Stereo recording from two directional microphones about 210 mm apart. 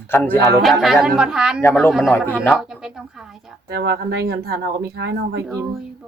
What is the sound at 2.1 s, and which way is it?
Speech, 10° left (ahead or behind).